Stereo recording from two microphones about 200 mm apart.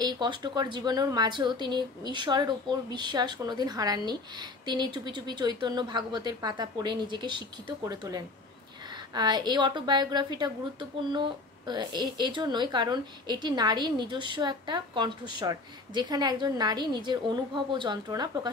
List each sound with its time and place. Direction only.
0.0 s a woman's voice: 20° right (ahead or behind)